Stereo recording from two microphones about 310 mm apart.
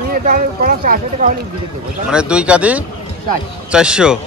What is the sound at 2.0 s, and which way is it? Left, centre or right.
A man's voice, centre.